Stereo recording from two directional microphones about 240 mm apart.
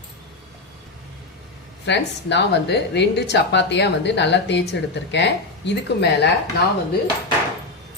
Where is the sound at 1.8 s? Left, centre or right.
Left.